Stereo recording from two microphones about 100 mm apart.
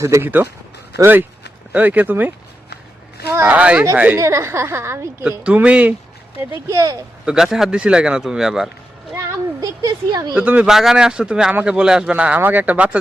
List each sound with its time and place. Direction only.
0.0 s a woman's voice: 30° right (ahead or behind)
3.4 s speech: 15° right (ahead or behind)
4.2 s a woman's voice: 30° right (ahead or behind)
5.4 s speech: 15° right (ahead or behind)
6.7 s speech: 35° right (ahead or behind)
7.3 s a man's voice: 5° right (ahead or behind)
9.6 s a sound: 40° right (ahead or behind)
10.3 s speech: 15° right (ahead or behind)